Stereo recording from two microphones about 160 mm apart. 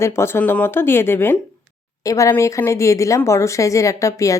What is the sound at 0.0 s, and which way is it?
Speech, 15° left (ahead or behind).